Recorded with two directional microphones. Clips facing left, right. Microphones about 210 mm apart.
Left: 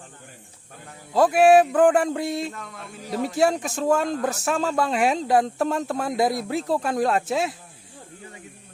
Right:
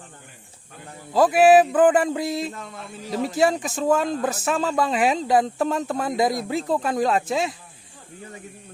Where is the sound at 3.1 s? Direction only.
Centre (ahead or behind).